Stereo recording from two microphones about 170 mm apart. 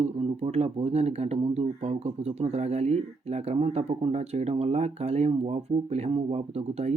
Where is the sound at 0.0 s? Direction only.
35° right (ahead or behind).